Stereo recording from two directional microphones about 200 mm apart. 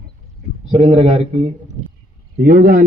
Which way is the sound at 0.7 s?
30° right (ahead or behind).